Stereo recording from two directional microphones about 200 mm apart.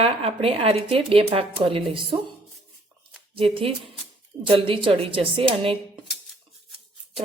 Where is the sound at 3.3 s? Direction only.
25° right (ahead or behind).